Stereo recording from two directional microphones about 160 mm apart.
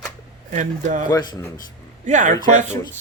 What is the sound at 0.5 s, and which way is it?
Speech, 50° right (ahead or behind).